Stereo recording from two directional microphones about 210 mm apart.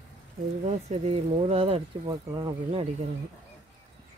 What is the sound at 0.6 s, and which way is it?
Speech, 30° right (ahead or behind).